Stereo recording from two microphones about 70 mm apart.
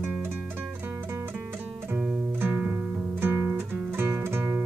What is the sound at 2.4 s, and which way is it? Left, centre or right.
Music, right.